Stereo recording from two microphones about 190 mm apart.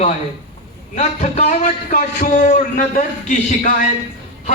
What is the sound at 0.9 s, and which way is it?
A man's voice, 35° left (ahead or behind).